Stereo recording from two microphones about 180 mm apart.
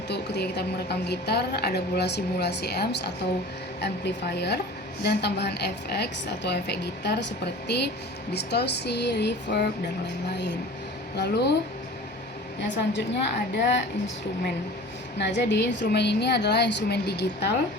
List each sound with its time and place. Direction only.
0.1 s a woman's voice: 70° left (ahead or behind)
11.2 s a woman's voice: 70° left (ahead or behind)
12.6 s a woman's voice: 75° left (ahead or behind)
15.2 s a woman's voice: 75° left (ahead or behind)